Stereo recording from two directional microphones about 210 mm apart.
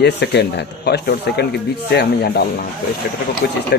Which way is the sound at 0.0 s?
55° left (ahead or behind).